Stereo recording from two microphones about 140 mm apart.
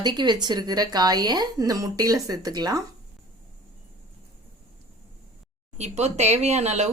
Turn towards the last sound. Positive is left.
turn(degrees=-55)  # may be behind; listen again after turning